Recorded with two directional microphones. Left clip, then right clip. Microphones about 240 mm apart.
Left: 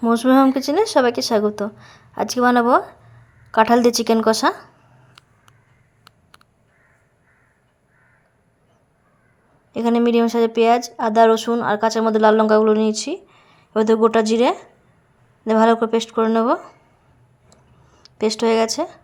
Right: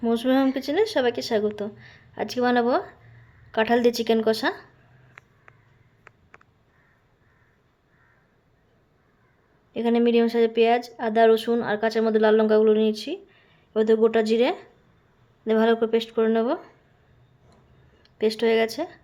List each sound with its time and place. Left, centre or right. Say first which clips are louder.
0.0 s speech: left 7 dB; centre
9.7 s a woman's voice: left 3 dB; centre
18.0 s speech: left 3 dB; centre